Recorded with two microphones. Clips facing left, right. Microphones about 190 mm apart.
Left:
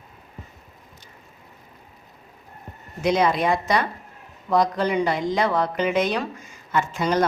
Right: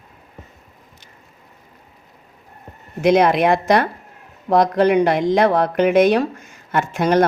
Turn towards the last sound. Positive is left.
turn(degrees=-60)  # may be behind; listen again after turning